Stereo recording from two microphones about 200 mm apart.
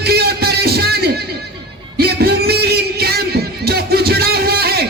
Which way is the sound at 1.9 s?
50° right (ahead or behind).